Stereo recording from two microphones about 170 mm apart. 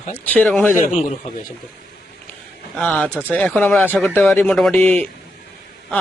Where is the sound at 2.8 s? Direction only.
10° left (ahead or behind).